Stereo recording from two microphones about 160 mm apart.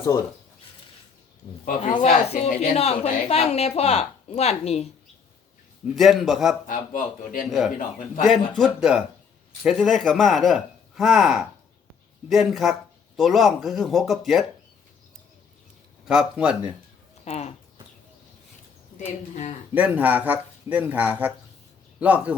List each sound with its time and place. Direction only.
0.0 s speech: 20° left (ahead or behind)
1.6 s a woman's voice: 55° left (ahead or behind)
5.8 s speech: centre (ahead or behind)
6.7 s speech: 60° left (ahead or behind)
8.3 s speech: centre (ahead or behind)
16.0 s speech: 5° right (ahead or behind)
17.2 s speech: 45° left (ahead or behind)
18.9 s speech: 45° left (ahead or behind)
19.7 s speech: 10° right (ahead or behind)